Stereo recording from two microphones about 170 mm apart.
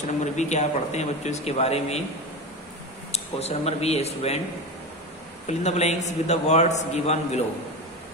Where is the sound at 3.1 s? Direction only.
40° left (ahead or behind).